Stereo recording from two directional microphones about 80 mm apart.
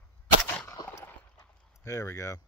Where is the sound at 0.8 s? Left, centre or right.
Left.